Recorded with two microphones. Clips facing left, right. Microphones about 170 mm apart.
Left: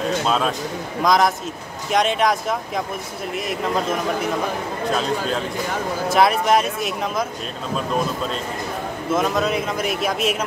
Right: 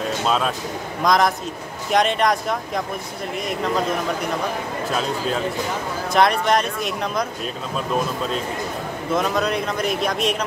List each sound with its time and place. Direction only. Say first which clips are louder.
0.3 s speech: left 1 dB; centre (ahead or behind)
6.0 s speech: left 1 dB; 5° left (ahead or behind)
9.1 s speech: left 1 dB; centre (ahead or behind)